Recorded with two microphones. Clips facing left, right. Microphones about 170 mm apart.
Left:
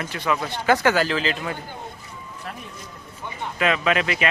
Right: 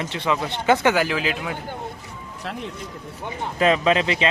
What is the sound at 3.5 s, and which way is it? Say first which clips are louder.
Speech: right 3 dB; 30° right (ahead or behind).